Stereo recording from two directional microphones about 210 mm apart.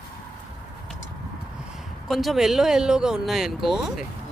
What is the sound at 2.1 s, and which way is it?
Speech, centre (ahead or behind).